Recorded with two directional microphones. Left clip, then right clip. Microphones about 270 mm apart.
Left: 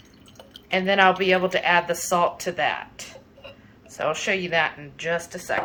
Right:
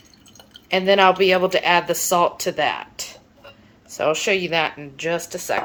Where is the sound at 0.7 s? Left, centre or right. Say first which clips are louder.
Right 3 dB; right.